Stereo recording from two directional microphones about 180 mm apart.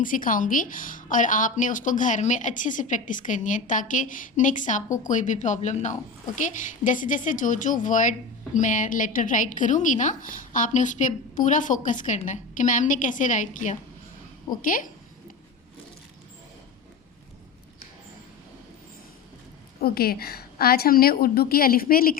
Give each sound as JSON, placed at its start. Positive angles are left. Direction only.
{"t": 0.0, "sound": "a woman's voice", "side_deg": 50}
{"t": 19.8, "sound": "a woman's voice", "side_deg": 60}